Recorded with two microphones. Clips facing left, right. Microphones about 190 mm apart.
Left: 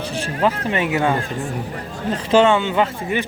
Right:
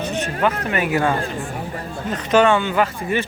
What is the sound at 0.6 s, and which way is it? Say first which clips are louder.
Speech: even; 25° left (ahead or behind).